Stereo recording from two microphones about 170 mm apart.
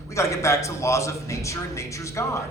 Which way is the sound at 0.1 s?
15° left (ahead or behind).